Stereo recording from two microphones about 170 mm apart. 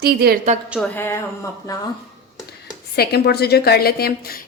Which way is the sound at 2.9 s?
70° left (ahead or behind).